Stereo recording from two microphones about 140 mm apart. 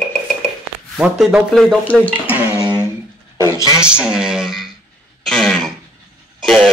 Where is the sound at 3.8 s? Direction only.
5° right (ahead or behind).